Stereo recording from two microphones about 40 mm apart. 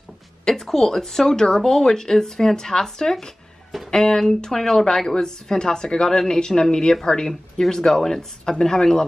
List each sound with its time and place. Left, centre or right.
0.5 s speech: centre